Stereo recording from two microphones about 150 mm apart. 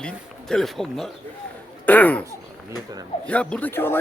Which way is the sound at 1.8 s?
10° left (ahead or behind).